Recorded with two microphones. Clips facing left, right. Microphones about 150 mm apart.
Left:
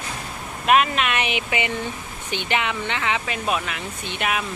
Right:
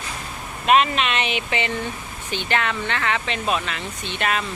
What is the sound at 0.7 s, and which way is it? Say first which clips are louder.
Speech: right 1 dB; 5° left (ahead or behind).